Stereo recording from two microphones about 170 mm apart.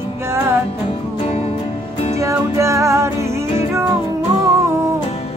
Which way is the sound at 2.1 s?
15° right (ahead or behind).